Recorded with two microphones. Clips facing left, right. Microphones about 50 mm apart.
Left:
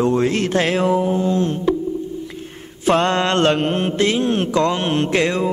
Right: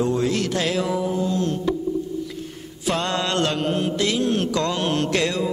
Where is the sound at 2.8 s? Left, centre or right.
Left.